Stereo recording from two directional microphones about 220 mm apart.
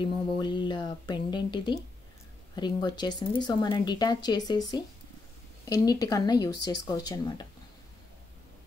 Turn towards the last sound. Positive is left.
turn(degrees=20)  # may be behind; listen again after turning